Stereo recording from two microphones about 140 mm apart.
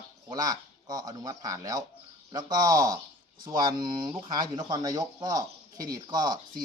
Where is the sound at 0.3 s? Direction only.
30° right (ahead or behind).